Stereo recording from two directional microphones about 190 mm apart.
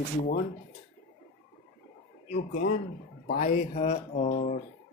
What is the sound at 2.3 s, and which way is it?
Speech, 45° left (ahead or behind).